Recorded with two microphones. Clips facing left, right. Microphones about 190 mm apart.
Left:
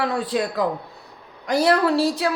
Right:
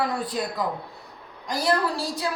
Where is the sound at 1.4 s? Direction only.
65° left (ahead or behind).